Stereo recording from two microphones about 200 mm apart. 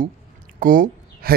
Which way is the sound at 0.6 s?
45° right (ahead or behind).